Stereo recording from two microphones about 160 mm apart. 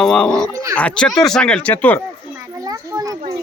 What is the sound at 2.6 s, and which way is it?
Children playing, 20° right (ahead or behind).